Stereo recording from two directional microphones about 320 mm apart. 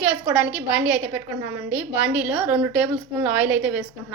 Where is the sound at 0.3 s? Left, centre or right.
Centre.